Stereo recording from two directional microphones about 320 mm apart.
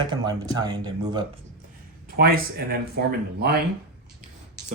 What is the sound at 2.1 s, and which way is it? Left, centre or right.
Speech, right.